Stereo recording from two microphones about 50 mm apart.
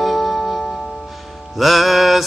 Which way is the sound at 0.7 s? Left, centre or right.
Centre.